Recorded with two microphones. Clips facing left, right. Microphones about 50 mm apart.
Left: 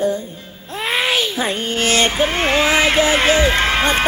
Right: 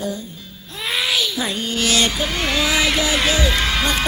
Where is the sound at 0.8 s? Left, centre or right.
Left.